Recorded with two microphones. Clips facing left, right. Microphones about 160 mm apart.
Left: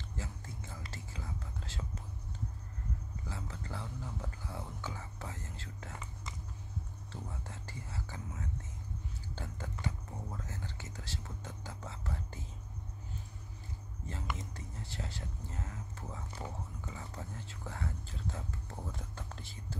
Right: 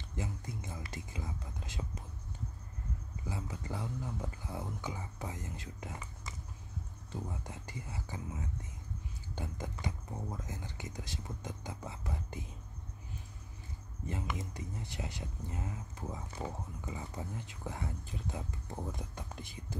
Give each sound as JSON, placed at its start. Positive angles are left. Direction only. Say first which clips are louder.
{"t": 0.1, "sound": "speech", "louder": "right 7 dB", "side_deg": -15}
{"t": 3.3, "sound": "speech", "louder": "right 4 dB", "side_deg": -15}
{"t": 7.1, "sound": "speech", "louder": "right 4 dB", "side_deg": -15}
{"t": 14.0, "sound": "speech", "louder": "right 3 dB", "side_deg": -15}